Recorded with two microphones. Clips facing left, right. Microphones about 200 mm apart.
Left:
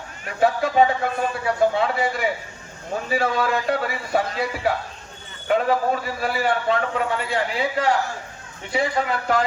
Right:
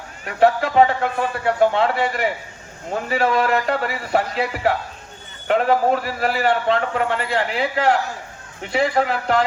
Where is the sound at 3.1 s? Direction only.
65° right (ahead or behind).